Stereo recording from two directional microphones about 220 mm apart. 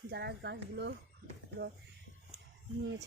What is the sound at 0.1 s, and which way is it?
Speech, 50° right (ahead or behind).